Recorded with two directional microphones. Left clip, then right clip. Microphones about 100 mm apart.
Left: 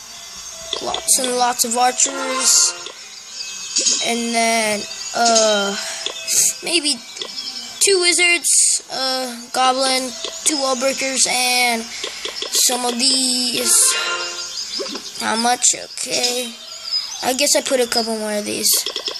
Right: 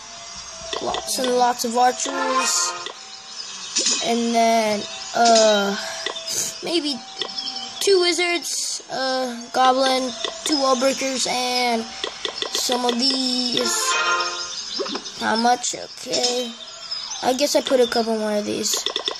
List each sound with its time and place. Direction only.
0.7 s speech: 10° right (ahead or behind)
3.9 s speech: 20° right (ahead or behind)